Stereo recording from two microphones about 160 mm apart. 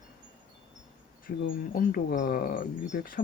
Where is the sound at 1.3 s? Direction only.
65° left (ahead or behind).